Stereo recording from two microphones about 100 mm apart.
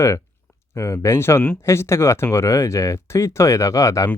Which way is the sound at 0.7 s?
30° left (ahead or behind).